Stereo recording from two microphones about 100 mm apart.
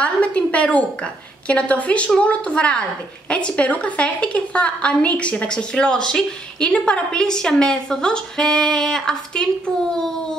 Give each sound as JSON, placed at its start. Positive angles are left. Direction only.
{"t": 0.0, "sound": "a woman's voice", "side_deg": 10}
{"t": 9.7, "sound": "a child's voice", "side_deg": -35}